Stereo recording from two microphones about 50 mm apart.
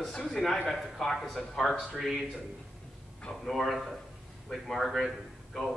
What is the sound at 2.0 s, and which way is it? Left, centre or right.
Speech, centre.